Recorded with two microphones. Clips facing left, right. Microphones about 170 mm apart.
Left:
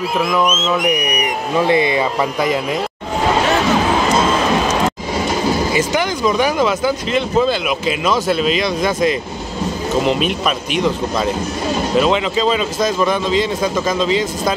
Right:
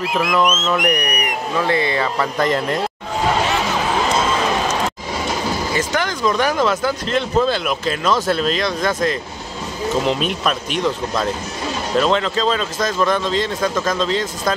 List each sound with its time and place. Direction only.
0.2 s speech: 5° left (ahead or behind)
0.5 s speech: 5° right (ahead or behind)
0.8 s speech: 10° left (ahead or behind)
5.7 s speech: 10° left (ahead or behind)